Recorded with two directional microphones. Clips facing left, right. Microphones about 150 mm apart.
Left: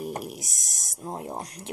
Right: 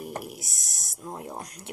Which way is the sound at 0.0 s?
20° left (ahead or behind).